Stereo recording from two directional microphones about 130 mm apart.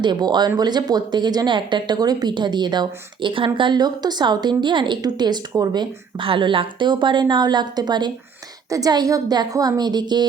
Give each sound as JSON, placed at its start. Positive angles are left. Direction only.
{"t": 0.0, "sound": "speech", "side_deg": -35}